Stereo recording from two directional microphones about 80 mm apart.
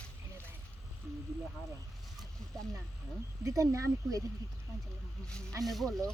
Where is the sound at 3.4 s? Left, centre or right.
Right.